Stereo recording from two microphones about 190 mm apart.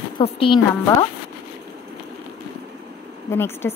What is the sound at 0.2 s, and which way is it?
Speech, 30° left (ahead or behind).